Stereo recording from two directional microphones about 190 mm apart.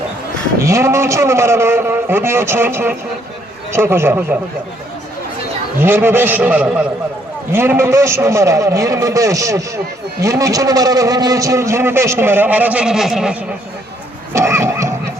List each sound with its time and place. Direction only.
0.6 s a man's voice: 15° right (ahead or behind)
5.8 s a man's voice: 10° right (ahead or behind)
14.3 s pig: 15° right (ahead or behind)